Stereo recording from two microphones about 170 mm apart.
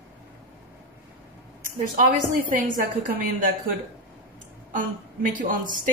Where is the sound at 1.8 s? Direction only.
55° right (ahead or behind).